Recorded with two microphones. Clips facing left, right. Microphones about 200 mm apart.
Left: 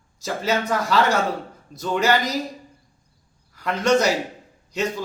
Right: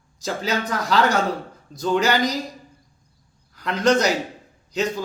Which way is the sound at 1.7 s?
30° right (ahead or behind).